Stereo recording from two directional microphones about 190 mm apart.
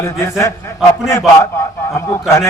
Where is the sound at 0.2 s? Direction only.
15° left (ahead or behind).